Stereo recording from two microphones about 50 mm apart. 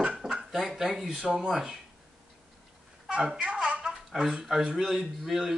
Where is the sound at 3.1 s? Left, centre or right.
Centre.